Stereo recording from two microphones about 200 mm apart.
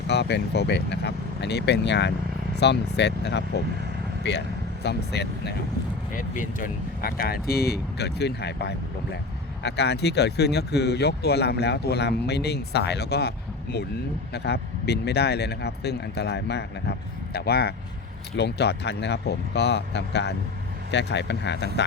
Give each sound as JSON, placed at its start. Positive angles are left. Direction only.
{"t": 0.1, "sound": "speech", "side_deg": 55}
{"t": 6.1, "sound": "speech", "side_deg": 40}
{"t": 14.3, "sound": "speech", "side_deg": 55}